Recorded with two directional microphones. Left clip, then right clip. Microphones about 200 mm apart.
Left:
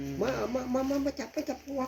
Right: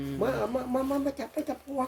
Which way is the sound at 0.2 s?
5° right (ahead or behind).